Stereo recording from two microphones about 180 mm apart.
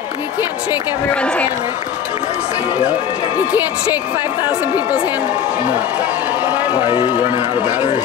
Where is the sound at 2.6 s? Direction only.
5° right (ahead or behind).